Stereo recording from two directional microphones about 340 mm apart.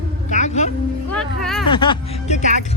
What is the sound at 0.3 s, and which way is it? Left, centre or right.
Music, left.